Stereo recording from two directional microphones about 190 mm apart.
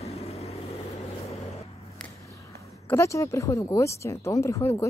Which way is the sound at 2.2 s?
15° left (ahead or behind).